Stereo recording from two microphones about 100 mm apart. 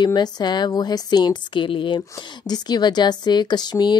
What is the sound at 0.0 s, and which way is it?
Speech, 45° left (ahead or behind).